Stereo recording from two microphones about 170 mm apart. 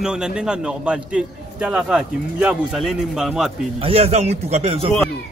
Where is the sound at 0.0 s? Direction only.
5° right (ahead or behind).